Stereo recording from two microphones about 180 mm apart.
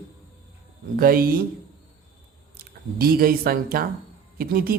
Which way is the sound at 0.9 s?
55° right (ahead or behind).